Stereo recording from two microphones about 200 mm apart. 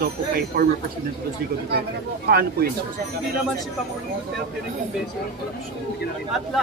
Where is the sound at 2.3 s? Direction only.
50° right (ahead or behind).